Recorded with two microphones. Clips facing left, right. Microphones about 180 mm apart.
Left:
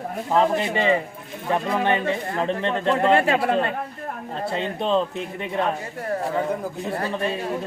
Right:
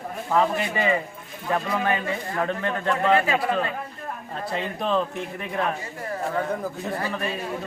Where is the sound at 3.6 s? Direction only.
55° left (ahead or behind).